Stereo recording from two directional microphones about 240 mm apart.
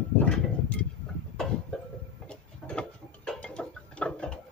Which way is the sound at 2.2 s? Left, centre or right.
Centre.